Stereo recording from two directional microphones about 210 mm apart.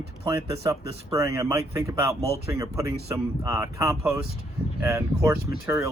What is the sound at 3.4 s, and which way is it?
Speech, 15° right (ahead or behind).